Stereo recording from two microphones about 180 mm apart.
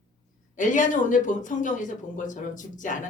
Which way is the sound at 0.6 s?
45° left (ahead or behind).